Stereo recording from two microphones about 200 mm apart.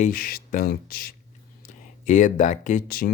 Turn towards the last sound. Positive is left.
turn(degrees=45)  # may be behind; listen again after turning